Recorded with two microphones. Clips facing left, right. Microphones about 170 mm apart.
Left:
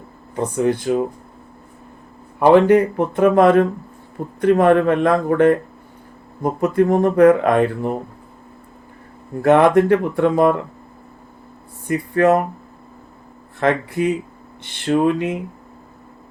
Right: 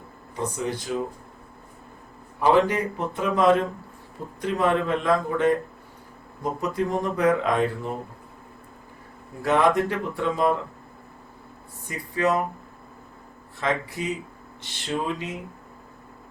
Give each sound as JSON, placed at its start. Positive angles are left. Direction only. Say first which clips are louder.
{"t": 0.3, "sound": "speech", "louder": "left 9 dB", "side_deg": 55}
{"t": 2.4, "sound": "speech", "louder": "left 9 dB", "side_deg": 60}
{"t": 9.4, "sound": "speech", "louder": "left 8 dB", "side_deg": 60}
{"t": 11.9, "sound": "speech", "louder": "left 9 dB", "side_deg": 55}
{"t": 13.6, "sound": "speech", "louder": "left 9 dB", "side_deg": 60}